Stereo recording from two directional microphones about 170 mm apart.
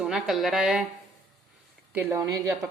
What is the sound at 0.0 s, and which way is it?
Speech, centre (ahead or behind).